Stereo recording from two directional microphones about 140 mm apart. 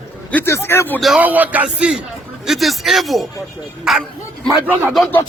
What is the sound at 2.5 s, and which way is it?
Music, centre (ahead or behind).